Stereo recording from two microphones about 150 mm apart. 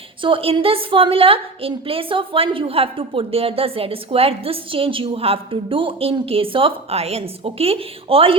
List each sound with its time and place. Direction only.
0.2 s a woman's voice: 35° right (ahead or behind)